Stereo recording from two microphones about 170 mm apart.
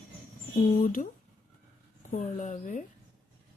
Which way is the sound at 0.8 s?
50° left (ahead or behind).